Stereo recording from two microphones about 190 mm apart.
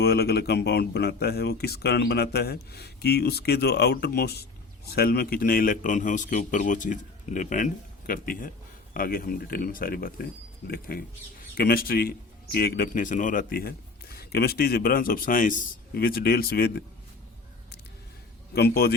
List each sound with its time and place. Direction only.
0.0 s a man's voice: 55° left (ahead or behind)
18.5 s speech: 55° left (ahead or behind)